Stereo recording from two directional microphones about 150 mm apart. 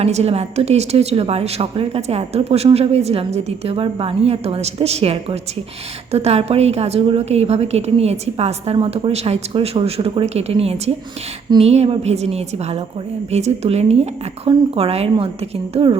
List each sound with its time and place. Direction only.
0.0 s a woman's voice: 45° right (ahead or behind)